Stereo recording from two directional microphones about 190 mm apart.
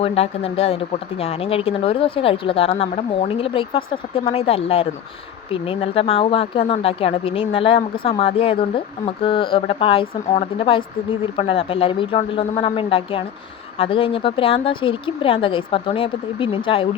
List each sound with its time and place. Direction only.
0.0 s speech: 30° left (ahead or behind)